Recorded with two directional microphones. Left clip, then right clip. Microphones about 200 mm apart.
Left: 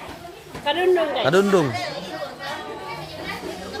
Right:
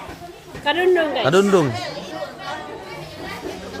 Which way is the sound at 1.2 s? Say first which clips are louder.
Right 2 dB; 10° right (ahead or behind).